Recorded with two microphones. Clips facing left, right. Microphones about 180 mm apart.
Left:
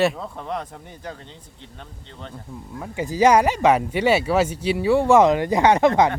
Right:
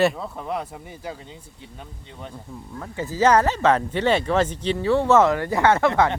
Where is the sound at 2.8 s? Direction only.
15° left (ahead or behind).